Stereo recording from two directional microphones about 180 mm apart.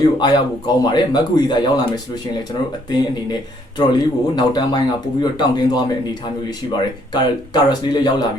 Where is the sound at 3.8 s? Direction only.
25° left (ahead or behind).